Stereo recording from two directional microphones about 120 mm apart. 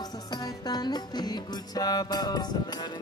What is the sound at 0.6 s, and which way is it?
Speech, 35° left (ahead or behind).